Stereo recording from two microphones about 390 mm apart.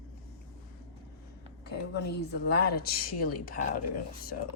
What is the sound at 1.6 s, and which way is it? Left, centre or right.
A woman's voice, left.